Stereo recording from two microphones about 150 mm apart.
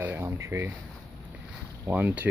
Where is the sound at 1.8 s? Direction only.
15° right (ahead or behind).